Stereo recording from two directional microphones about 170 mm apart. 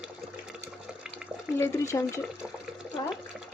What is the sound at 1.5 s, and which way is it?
Speech, 15° left (ahead or behind).